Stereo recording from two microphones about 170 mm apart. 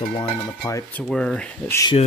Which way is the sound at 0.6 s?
20° left (ahead or behind).